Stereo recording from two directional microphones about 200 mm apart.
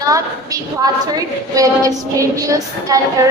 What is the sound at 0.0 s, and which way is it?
A woman's voice, 15° right (ahead or behind).